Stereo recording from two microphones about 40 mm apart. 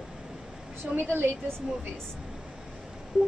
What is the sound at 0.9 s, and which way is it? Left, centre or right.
Speech, right.